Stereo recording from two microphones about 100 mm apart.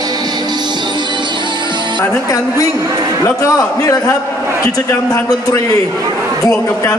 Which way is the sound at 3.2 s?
35° left (ahead or behind).